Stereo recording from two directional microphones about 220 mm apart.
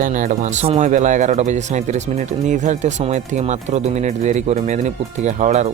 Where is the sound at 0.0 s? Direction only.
35° right (ahead or behind).